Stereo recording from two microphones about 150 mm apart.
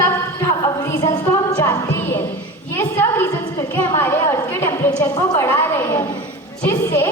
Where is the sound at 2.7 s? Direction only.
15° left (ahead or behind).